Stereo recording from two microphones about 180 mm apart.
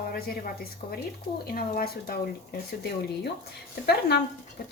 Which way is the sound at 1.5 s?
55° left (ahead or behind).